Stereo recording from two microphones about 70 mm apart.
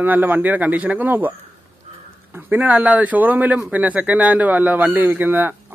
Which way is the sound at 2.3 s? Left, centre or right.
Right.